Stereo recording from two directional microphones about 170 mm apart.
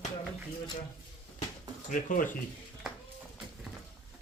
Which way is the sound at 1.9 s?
50° left (ahead or behind).